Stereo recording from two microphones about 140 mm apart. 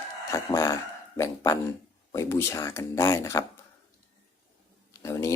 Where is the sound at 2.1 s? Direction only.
20° left (ahead or behind).